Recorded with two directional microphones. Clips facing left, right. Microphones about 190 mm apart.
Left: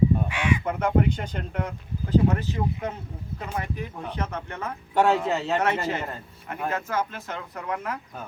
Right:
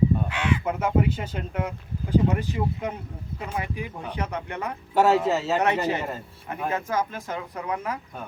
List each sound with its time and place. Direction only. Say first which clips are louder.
0.3 s crow: even; 10° left (ahead or behind)
0.6 s speech: even; 5° right (ahead or behind)
4.9 s speech: right 2 dB; 5° right (ahead or behind)
5.6 s speech: right 2 dB; 15° right (ahead or behind)